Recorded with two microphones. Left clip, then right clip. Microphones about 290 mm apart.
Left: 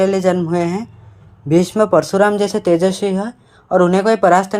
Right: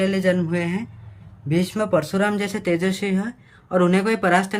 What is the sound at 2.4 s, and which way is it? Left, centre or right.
Speech, centre.